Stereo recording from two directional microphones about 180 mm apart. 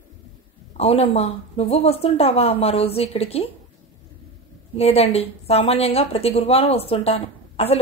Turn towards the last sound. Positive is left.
turn(degrees=35)  # may be behind; listen again after turning